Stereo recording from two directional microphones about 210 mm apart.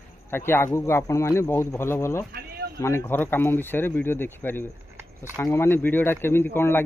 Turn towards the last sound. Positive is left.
turn(degrees=10)  # may be behind; listen again after turning